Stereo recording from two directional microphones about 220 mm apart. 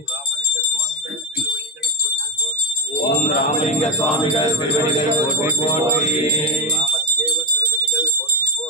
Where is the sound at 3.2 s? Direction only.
40° left (ahead or behind).